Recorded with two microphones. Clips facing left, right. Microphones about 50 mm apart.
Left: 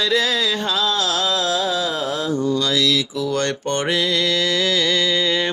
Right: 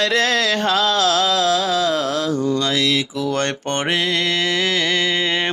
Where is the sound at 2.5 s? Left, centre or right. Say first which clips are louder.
Even; right.